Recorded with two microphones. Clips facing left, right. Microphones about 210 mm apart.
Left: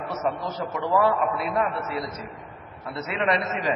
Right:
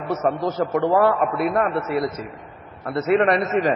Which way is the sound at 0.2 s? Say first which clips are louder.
Right 6 dB; 55° right (ahead or behind).